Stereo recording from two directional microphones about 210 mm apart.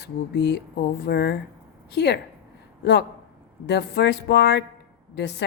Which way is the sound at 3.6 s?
55° left (ahead or behind).